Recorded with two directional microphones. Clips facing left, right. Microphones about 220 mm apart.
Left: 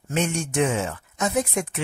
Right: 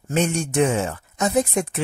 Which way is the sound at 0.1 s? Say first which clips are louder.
Right 3 dB; 40° right (ahead or behind).